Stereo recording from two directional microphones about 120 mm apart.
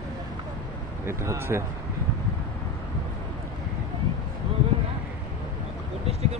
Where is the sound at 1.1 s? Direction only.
20° right (ahead or behind).